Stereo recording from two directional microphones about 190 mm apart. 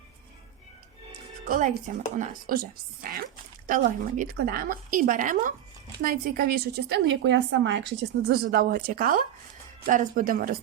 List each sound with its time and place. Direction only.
1.5 s a woman's voice: 45° right (ahead or behind)